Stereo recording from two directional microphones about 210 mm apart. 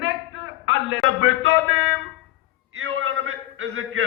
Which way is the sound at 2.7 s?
75° right (ahead or behind).